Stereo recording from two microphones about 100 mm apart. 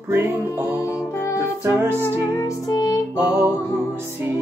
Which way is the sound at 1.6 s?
20° right (ahead or behind).